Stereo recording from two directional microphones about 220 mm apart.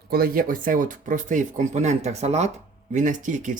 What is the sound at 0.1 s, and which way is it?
Speech, 40° right (ahead or behind).